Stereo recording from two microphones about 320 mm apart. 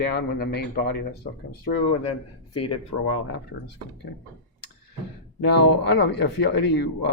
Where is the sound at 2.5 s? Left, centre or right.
Left.